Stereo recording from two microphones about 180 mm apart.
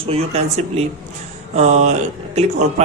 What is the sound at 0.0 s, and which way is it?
Speech, 35° right (ahead or behind).